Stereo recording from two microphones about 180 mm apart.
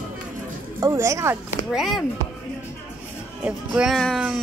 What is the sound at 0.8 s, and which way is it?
Speech, 15° right (ahead or behind).